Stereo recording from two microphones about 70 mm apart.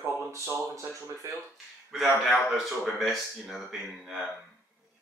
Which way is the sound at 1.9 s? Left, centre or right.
Centre.